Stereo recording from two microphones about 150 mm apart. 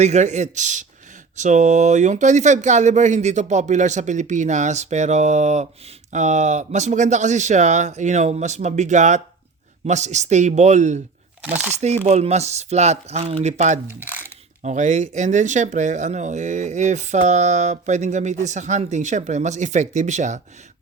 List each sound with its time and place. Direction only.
0.0 s speech: 50° right (ahead or behind)
11.4 s speech: 10° right (ahead or behind)
12.0 s speech: 50° right (ahead or behind)
13.8 s speech: 15° right (ahead or behind)
14.6 s speech: 55° right (ahead or behind)